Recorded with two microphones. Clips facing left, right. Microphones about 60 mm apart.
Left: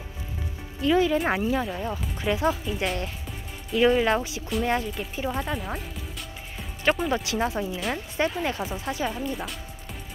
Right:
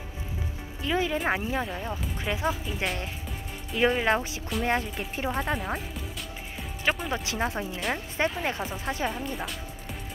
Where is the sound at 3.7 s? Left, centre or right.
Right.